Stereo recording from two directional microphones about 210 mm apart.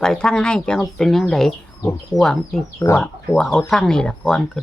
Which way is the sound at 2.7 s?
15° left (ahead or behind).